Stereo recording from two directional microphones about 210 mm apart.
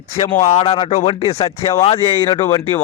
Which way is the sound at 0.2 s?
30° left (ahead or behind).